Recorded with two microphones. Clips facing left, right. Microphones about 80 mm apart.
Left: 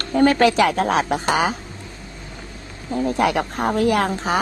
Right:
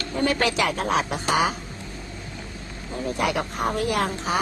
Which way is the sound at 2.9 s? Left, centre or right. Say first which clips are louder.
Left 6 dB; left.